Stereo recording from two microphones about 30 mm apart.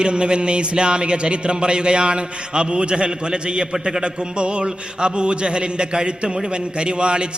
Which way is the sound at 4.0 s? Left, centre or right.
Right.